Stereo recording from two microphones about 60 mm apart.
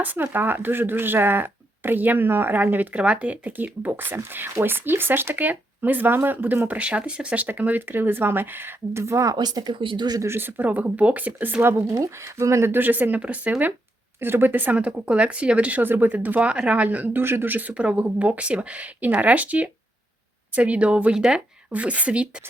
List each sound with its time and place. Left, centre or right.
0.0 s speech: right
4.2 s speech: right
9.3 s speech: right
10.2 s speech: right
10.6 s speech: right
11.9 s speech: right
12.7 s speech: right
14.2 s speech: right
17.2 s speech: right